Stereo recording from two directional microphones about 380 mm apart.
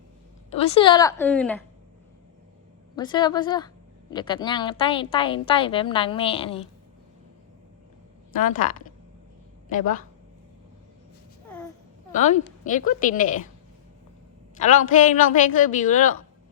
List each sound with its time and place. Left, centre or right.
0.5 s a woman's voice: centre
2.9 s a woman's voice: centre
9.6 s a woman's voice: left
12.1 s a woman's voice: centre
14.6 s a woman's voice: centre